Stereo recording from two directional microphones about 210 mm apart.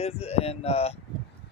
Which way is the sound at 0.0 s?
30° left (ahead or behind).